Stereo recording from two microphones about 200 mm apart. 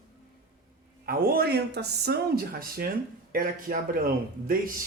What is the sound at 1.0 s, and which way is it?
Speech, 50° right (ahead or behind).